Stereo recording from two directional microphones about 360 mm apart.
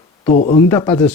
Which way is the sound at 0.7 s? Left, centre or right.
Centre.